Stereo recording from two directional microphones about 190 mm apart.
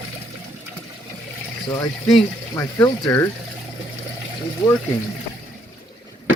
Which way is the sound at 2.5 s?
15° left (ahead or behind).